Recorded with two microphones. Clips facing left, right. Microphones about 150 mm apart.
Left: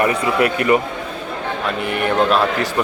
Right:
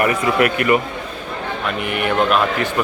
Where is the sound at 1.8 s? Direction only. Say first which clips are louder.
Left 1 dB; 35° left (ahead or behind).